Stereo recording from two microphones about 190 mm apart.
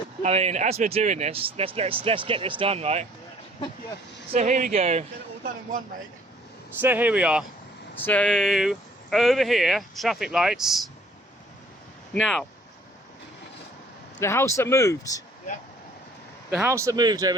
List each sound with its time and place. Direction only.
0.2 s speech: 35° right (ahead or behind)
4.4 s speech: 40° right (ahead or behind)
6.8 s speech: 10° right (ahead or behind)
7.9 s speech: 10° left (ahead or behind)
12.1 s speech: 5° left (ahead or behind)
14.2 s speech: 15° left (ahead or behind)
16.6 s speech: 15° right (ahead or behind)